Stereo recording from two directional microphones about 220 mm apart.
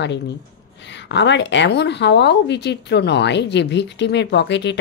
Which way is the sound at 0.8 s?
55° left (ahead or behind).